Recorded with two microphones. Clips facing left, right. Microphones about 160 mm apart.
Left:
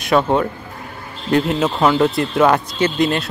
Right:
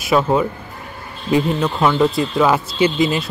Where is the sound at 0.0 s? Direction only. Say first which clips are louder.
Even; 5° right (ahead or behind).